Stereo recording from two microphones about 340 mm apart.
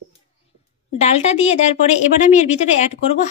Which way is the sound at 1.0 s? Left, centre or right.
Centre.